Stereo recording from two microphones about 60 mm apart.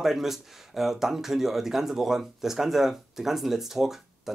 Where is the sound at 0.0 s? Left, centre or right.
Centre.